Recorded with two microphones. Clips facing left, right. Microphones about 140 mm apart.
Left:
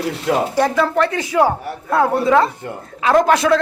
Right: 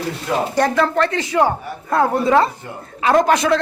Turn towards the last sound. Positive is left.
turn(degrees=0)  # may be behind; listen again after turning